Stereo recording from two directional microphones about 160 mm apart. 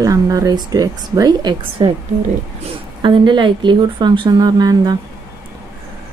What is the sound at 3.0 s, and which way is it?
Speech, 30° right (ahead or behind).